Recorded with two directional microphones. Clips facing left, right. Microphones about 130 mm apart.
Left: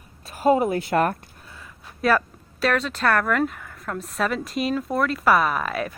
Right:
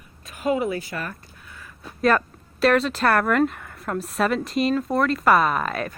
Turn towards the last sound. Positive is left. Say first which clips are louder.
# right 1 dB
turn(degrees=5)  # may be behind; listen again after turning